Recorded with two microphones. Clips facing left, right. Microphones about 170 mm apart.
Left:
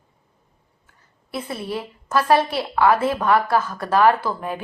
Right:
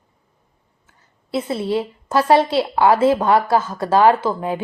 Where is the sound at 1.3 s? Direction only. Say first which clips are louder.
Right 7 dB; 25° right (ahead or behind).